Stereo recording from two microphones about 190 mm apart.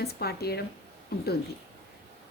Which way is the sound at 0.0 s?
55° left (ahead or behind).